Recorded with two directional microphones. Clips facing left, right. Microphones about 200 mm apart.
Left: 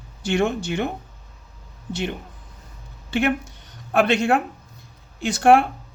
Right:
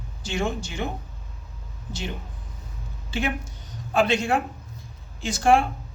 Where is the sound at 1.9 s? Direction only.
60° left (ahead or behind).